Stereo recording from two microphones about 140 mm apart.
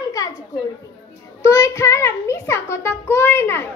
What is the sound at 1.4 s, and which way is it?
Music, 20° left (ahead or behind).